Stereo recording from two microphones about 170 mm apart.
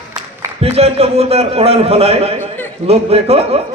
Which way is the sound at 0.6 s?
35° right (ahead or behind).